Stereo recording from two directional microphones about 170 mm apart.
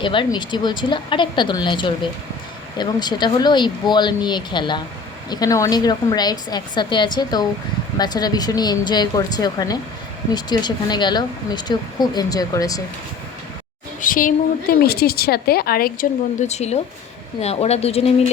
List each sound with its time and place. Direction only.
0.0 s speech: 30° left (ahead or behind)
14.0 s a woman's voice: 55° left (ahead or behind)
16.4 s speech: 40° left (ahead or behind)